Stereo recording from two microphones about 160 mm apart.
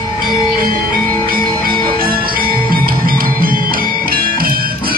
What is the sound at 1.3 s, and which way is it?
Music, 65° right (ahead or behind).